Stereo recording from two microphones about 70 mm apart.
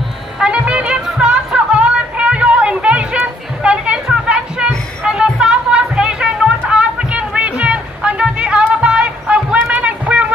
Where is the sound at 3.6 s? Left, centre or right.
Centre.